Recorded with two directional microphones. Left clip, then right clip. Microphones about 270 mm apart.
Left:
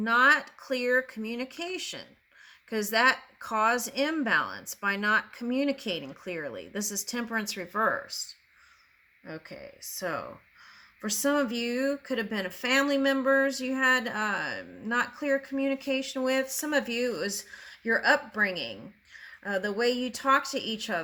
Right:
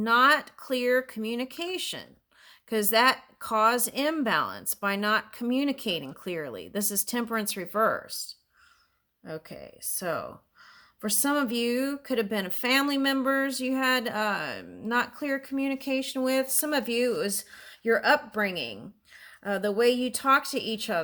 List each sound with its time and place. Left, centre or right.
0.0 s speech: right
9.2 s speech: right